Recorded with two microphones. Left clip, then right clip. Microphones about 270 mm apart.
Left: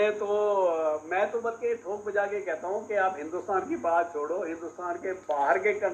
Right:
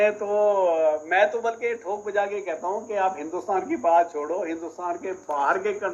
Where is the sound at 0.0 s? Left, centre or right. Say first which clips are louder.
Right 5 dB; right.